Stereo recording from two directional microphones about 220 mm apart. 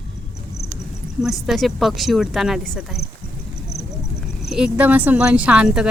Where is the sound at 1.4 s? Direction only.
Centre (ahead or behind).